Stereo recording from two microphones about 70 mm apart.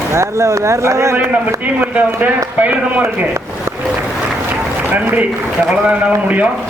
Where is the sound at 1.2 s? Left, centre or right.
Right.